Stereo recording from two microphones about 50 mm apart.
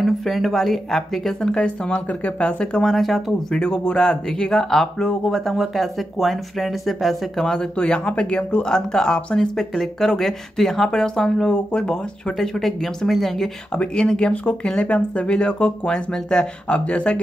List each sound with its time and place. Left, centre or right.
0.0 s speech: centre
2.0 s speech: left
2.8 s speech: centre
3.4 s speech: centre
7.7 s speech: centre
12.4 s speech: centre
13.7 s speech: centre
14.4 s speech: left
16.6 s speech: left